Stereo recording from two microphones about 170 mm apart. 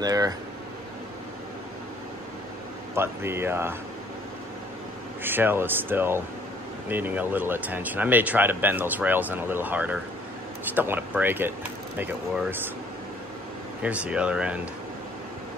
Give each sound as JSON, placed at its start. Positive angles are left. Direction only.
{"t": 0.0, "sound": "speech", "side_deg": -20}
{"t": 2.9, "sound": "speech", "side_deg": -15}
{"t": 5.2, "sound": "speech", "side_deg": -10}
{"t": 13.8, "sound": "speech", "side_deg": -5}